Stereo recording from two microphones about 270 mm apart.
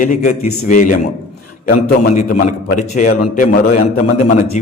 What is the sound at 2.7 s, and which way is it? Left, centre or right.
A man's voice, left.